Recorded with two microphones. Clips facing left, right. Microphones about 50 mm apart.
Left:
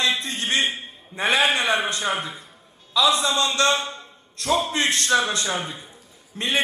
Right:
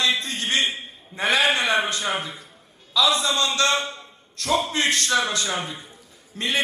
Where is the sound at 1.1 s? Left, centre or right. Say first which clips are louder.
Left 1 dB; left.